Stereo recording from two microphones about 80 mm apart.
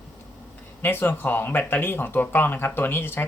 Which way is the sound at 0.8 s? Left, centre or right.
Left.